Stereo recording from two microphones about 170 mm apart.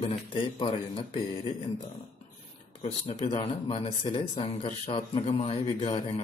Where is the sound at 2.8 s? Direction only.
40° left (ahead or behind).